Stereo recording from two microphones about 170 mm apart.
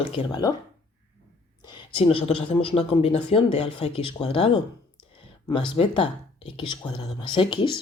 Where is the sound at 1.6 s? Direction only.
25° left (ahead or behind).